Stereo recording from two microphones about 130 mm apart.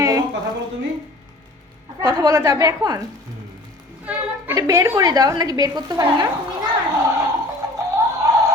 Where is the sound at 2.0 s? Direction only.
35° right (ahead or behind).